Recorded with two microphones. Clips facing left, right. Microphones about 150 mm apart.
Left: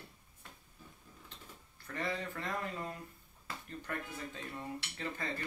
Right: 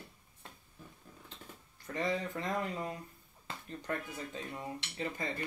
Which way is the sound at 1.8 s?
20° right (ahead or behind).